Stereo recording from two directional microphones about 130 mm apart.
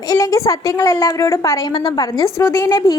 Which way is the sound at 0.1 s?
25° left (ahead or behind).